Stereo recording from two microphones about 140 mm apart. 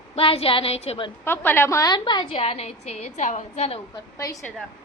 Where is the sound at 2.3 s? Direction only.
45° left (ahead or behind).